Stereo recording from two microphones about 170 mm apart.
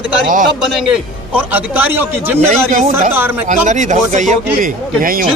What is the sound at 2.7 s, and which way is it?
Speech, 45° right (ahead or behind).